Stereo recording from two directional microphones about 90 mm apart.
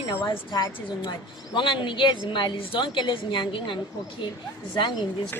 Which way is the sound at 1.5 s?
65° left (ahead or behind).